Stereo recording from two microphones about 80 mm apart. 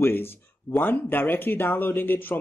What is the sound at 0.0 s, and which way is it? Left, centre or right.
A man's voice, left.